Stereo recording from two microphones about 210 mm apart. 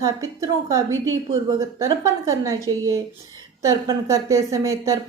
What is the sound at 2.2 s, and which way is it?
A woman's voice, 15° right (ahead or behind).